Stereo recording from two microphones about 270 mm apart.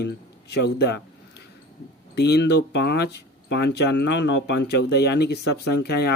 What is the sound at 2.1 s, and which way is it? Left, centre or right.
Speech, left.